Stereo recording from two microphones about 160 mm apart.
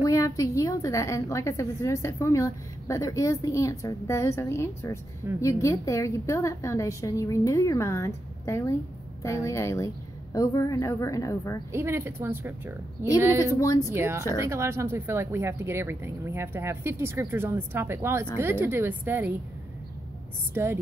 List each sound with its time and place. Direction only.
0.0 s a woman's voice: 20° left (ahead or behind)
11.7 s speech: 15° right (ahead or behind)
13.6 s a woman's voice: 20° left (ahead or behind)
13.8 s speech: 15° right (ahead or behind)
20.5 s speech: 15° right (ahead or behind)